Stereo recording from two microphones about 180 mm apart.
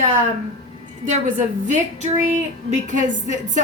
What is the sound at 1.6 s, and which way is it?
Speech, 45° right (ahead or behind).